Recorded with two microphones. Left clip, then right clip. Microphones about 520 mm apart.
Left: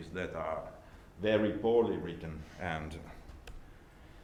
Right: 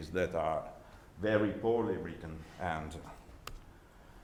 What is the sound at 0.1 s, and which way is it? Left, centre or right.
Speech, right.